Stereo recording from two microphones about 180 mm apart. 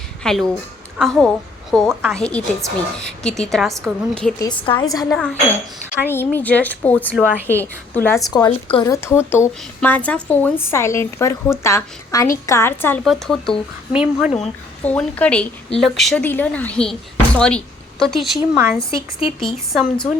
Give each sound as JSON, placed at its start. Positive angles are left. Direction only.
{"t": 0.2, "sound": "a woman's voice", "side_deg": 5}
{"t": 4.4, "sound": "a woman's voice", "side_deg": 25}
{"t": 5.1, "sound": "a woman's voice", "side_deg": 5}
{"t": 8.3, "sound": "a woman's voice", "side_deg": 20}
{"t": 13.1, "sound": "a woman's voice", "side_deg": 0}
{"t": 14.8, "sound": "a woman's voice", "side_deg": 10}
{"t": 18.5, "sound": "speech", "side_deg": -10}
{"t": 18.9, "sound": "a woman's voice", "side_deg": 30}
{"t": 19.5, "sound": "a woman's voice", "side_deg": 0}